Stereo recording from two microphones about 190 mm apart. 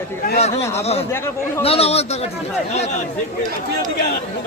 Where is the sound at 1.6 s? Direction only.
30° left (ahead or behind).